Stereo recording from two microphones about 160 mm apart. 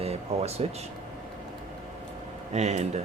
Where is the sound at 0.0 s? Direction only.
40° right (ahead or behind).